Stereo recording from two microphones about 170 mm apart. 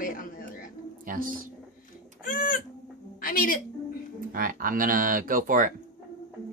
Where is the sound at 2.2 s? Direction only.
55° left (ahead or behind).